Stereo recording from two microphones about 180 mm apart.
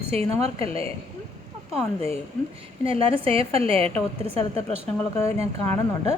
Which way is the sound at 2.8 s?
30° right (ahead or behind).